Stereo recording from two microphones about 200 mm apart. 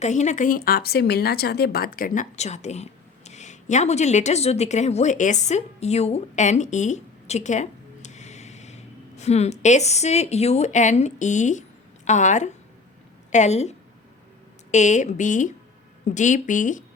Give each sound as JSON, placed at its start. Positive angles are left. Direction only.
{"t": 0.0, "sound": "a woman's voice", "side_deg": 35}